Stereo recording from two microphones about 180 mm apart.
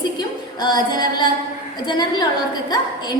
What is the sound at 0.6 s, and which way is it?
A woman's voice, 25° left (ahead or behind).